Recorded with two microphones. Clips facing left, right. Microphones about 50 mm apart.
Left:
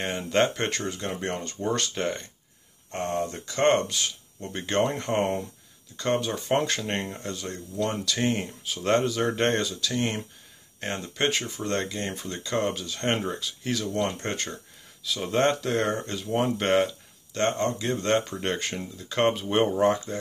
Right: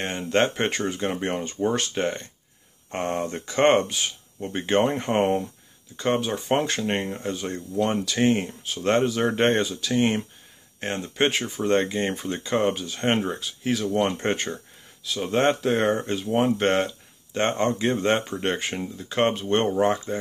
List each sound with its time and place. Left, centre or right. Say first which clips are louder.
0.2 s speech: right 2 dB; centre
0.6 s speech: right 4 dB; centre
2.9 s speech: right 2 dB; right
3.9 s speech: right 1 dB; centre
7.2 s speech: right 5 dB; right
8.1 s speech: right 5 dB; centre
11.7 s speech: right 7 dB; right; by 13.9 s centre
13.9 s speech: right 5 dB; right
15.0 s speech: right 2 dB; centre
15.6 s speech: right 4 dB; centre
16.3 s speech: right 1 dB; centre
17.3 s speech: right 1 dB; centre
17.6 s speech: right 4 dB; right
17.9 s speech: right 2 dB; centre